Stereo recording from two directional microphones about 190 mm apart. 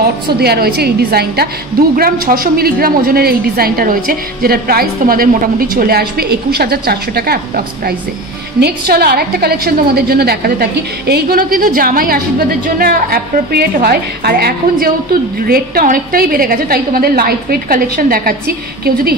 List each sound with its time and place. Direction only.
0.0 s a woman's voice: 55° right (ahead or behind)